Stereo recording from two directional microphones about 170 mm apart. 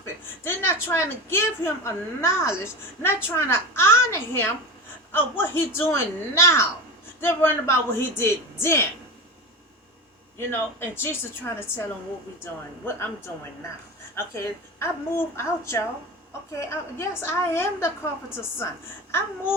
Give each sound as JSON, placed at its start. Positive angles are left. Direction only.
{"t": 0.0, "sound": "a woman's voice", "side_deg": 15}
{"t": 10.3, "sound": "a woman's voice", "side_deg": 15}